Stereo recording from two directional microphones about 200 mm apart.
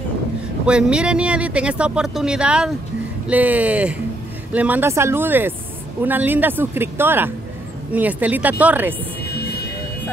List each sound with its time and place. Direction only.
0.7 s speech: 5° right (ahead or behind)
9.2 s music: 55° left (ahead or behind)